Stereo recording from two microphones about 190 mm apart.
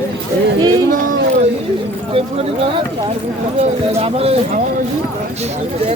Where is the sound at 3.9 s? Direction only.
30° right (ahead or behind).